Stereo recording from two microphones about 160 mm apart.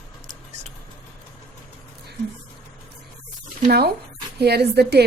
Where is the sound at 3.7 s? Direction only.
85° right.